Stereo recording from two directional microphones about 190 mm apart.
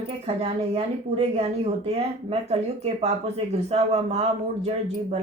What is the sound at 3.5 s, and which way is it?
Speech, 35° right (ahead or behind).